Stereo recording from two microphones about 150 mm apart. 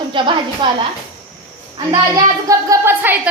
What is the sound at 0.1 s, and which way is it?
Speech, 35° right (ahead or behind).